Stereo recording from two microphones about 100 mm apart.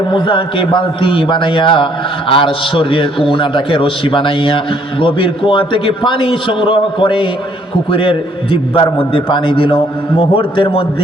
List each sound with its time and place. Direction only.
0.1 s a man's voice: 60° left (ahead or behind)